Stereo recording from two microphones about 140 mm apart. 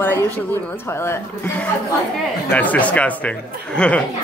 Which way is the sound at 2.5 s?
10° left (ahead or behind).